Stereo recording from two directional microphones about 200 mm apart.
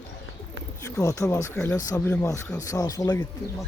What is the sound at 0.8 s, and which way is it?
Speech, 15° left (ahead or behind).